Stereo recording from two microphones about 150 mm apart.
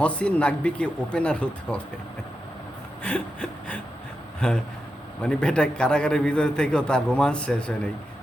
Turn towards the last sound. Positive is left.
turn(degrees=5)  # may be behind; listen again after turning